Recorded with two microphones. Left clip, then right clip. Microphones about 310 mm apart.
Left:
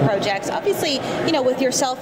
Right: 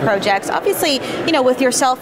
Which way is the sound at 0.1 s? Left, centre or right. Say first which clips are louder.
Right 5 dB; right.